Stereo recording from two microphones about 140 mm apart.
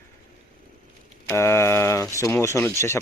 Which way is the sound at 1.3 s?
20° left (ahead or behind).